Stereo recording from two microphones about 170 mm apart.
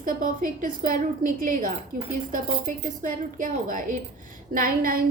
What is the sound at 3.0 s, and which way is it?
A woman's voice, 50° right (ahead or behind).